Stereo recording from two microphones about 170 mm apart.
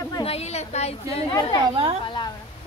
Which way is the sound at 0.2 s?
35° left (ahead or behind).